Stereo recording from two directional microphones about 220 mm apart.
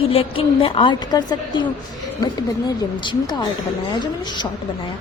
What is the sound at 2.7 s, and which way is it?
A woman's voice, 20° left (ahead or behind).